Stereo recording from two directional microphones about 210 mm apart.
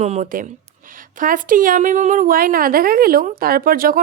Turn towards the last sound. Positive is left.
turn(degrees=-45)  # may be behind; listen again after turning